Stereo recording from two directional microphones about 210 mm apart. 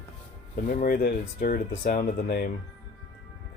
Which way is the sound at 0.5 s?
40° left (ahead or behind).